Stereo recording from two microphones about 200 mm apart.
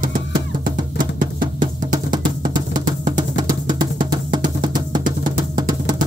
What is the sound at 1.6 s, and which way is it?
Music, 20° right (ahead or behind).